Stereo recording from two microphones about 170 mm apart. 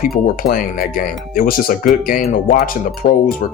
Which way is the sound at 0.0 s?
55° left (ahead or behind).